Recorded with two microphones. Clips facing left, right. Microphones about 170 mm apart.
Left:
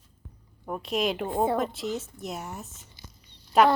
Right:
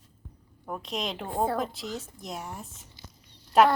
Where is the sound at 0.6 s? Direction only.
5° left (ahead or behind).